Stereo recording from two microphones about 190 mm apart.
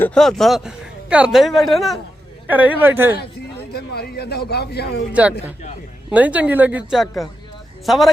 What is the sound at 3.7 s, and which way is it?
A man's voice, 55° left (ahead or behind).